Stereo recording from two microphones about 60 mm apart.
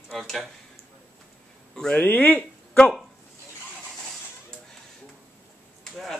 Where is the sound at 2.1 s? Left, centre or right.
Left.